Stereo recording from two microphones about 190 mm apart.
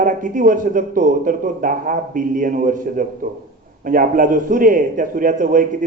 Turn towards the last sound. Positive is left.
turn(degrees=-45)  # may be behind; listen again after turning